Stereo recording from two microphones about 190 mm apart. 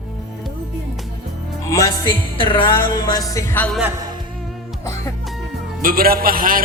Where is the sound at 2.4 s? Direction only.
25° left (ahead or behind).